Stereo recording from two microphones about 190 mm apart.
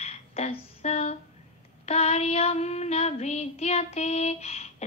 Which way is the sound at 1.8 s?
35° left (ahead or behind).